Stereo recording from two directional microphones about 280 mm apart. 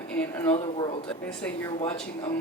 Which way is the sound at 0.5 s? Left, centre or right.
Left.